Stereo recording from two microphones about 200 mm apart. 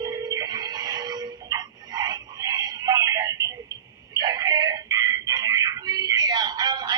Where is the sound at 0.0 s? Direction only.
20° right (ahead or behind).